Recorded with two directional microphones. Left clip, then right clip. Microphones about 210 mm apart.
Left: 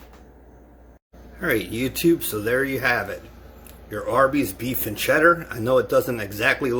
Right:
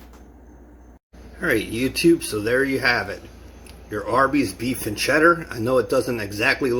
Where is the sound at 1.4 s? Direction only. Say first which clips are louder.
Right 2 dB; 5° left (ahead or behind).